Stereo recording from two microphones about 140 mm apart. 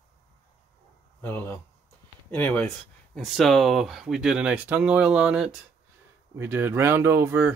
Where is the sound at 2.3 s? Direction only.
10° left (ahead or behind).